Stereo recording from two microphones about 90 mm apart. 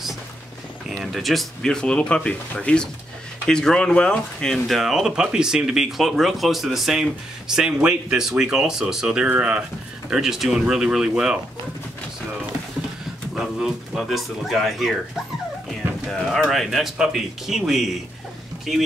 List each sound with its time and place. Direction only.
0.8 s speech: centre (ahead or behind)
13.3 s speech: 5° right (ahead or behind)
16.1 s speech: 5° left (ahead or behind)